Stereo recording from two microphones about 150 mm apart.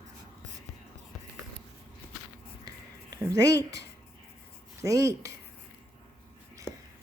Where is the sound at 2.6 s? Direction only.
25° right (ahead or behind).